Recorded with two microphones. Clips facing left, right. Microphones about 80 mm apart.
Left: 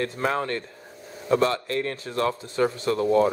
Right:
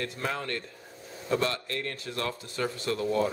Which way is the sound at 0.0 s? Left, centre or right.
Left.